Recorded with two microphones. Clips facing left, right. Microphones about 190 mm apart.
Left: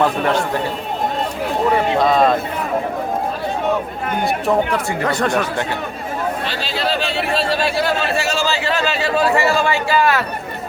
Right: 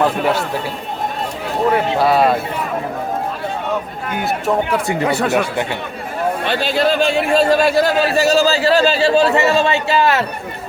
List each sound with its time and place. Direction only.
0.0 s speech: 5° right (ahead or behind)
1.7 s speech: 10° right (ahead or behind)
4.2 s speech: 5° right (ahead or behind)
6.4 s speech: 55° right (ahead or behind); by 10.2 s 25° right (ahead or behind)